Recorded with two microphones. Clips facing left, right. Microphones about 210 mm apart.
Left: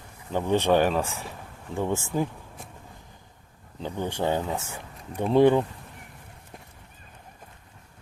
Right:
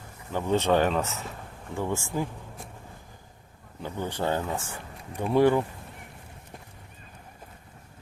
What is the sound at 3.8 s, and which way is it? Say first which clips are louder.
Speech: left 2 dB; 15° left (ahead or behind).